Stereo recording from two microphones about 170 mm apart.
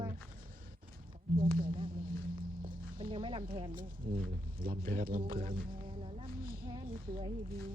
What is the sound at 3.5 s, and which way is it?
Speech, 30° right (ahead or behind).